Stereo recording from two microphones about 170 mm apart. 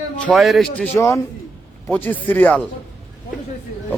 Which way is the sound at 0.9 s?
15° left (ahead or behind).